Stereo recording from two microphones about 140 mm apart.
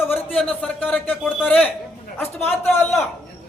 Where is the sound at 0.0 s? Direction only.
15° left (ahead or behind).